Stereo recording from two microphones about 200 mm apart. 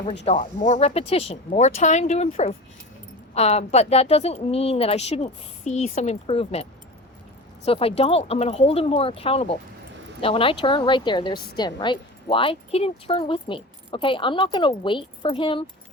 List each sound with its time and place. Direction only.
0.0 s a woman's voice: 40° left (ahead or behind)